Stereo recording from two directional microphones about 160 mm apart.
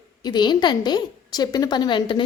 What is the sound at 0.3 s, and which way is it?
A woman's voice, 30° left (ahead or behind).